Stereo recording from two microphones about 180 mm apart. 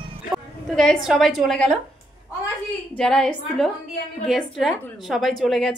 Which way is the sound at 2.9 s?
5° left (ahead or behind).